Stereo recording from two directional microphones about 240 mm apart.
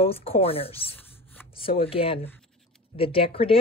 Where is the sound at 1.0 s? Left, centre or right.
Centre.